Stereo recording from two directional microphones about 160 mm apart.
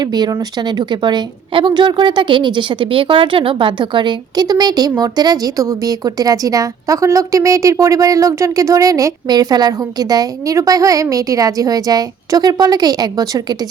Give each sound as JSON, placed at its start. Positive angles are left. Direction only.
{"t": 0.0, "sound": "a woman's voice", "side_deg": -25}